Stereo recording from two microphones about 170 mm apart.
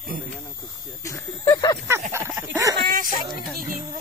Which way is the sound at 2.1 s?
15° right (ahead or behind).